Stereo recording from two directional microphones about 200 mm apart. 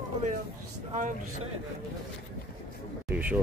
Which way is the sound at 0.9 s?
40° right (ahead or behind).